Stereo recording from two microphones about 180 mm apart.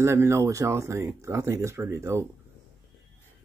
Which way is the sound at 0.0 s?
15° right (ahead or behind).